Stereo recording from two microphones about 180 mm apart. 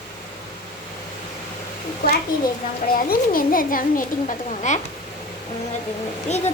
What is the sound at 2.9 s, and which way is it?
A woman's voice, 50° left (ahead or behind).